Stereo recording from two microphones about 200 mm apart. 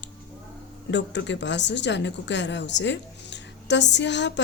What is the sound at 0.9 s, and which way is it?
Speech, 60° left (ahead or behind).